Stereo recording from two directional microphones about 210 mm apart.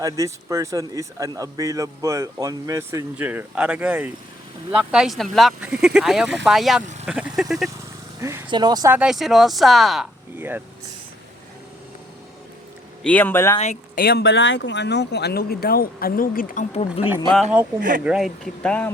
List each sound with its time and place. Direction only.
0.0 s speech: 15° right (ahead or behind)
8.2 s speech: 15° right (ahead or behind)
9.0 s speech: centre (ahead or behind)
13.0 s speech: 5° left (ahead or behind)
13.6 s speech: 35° left (ahead or behind)
14.0 s speech: 50° left (ahead or behind); by 17.1 s 35° left (ahead or behind)
17.7 s speech: 40° right (ahead or behind)
18.0 s speech: centre (ahead or behind)